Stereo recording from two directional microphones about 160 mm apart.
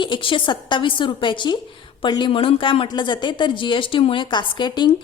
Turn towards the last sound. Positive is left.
turn(degrees=25)  # may be behind; listen again after turning